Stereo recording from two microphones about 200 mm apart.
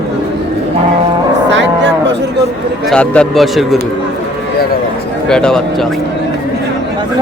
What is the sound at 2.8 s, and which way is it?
Speech, 5° left (ahead or behind).